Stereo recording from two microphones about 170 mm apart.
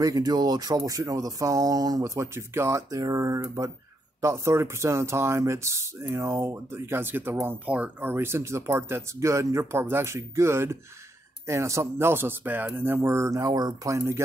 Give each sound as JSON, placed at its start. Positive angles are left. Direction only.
{"t": 0.0, "sound": "speech", "side_deg": -20}